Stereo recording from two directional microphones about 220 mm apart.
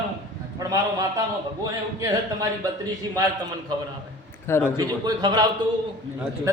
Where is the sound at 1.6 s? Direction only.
15° right (ahead or behind).